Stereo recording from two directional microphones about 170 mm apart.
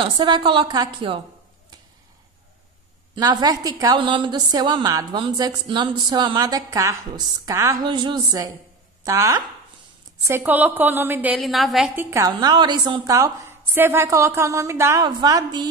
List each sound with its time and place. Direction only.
0.0 s a woman's voice: 30° right (ahead or behind)
3.2 s a woman's voice: 25° right (ahead or behind); by 12.0 s centre (ahead or behind)
12.0 s a woman's voice: 15° right (ahead or behind)